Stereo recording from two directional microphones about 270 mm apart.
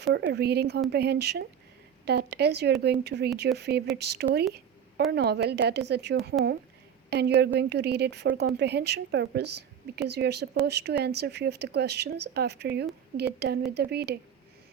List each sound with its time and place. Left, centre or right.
0.0 s speech: right